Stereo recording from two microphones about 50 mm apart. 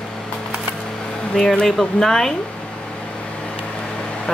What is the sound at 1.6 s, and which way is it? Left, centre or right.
Speech, centre.